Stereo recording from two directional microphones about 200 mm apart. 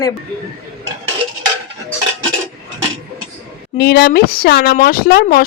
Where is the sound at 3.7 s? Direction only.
50° left (ahead or behind).